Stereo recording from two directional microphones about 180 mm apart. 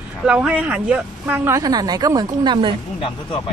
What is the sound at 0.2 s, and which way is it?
Speech, 5° right (ahead or behind).